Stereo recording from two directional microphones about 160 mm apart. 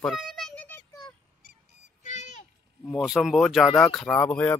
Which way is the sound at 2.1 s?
50° left (ahead or behind).